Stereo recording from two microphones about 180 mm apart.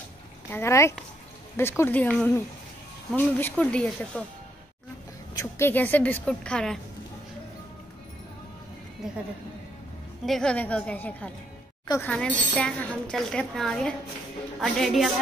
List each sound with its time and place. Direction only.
0.5 s speech: 15° left (ahead or behind)
5.3 s speech: 15° left (ahead or behind)
9.0 s speech: 5° right (ahead or behind)
10.2 s speech: 5° left (ahead or behind)